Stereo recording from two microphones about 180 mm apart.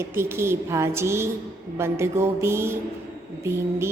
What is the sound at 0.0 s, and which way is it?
A woman's voice, 15° right (ahead or behind).